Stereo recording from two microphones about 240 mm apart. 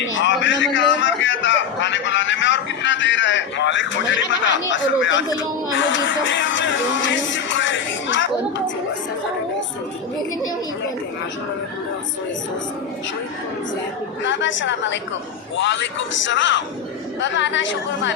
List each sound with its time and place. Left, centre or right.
0.1 s a sound: left
5.9 s music: left
14.3 s a man's voice: left